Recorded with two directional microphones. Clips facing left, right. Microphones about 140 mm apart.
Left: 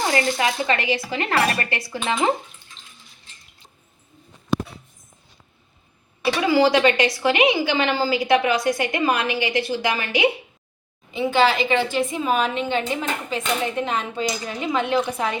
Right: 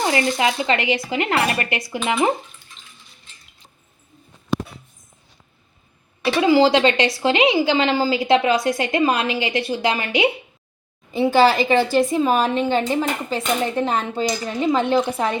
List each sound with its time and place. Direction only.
0.0 s a woman's voice: 20° right (ahead or behind)
6.4 s a woman's voice: 20° right (ahead or behind)
11.1 s a woman's voice: 40° right (ahead or behind)